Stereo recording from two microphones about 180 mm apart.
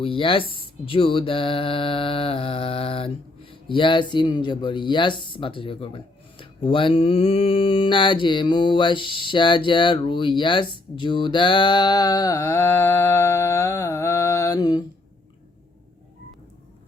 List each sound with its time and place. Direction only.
0.0 s mantra: 30° left (ahead or behind)